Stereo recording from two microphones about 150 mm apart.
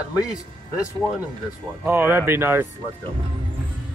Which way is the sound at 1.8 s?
15° right (ahead or behind).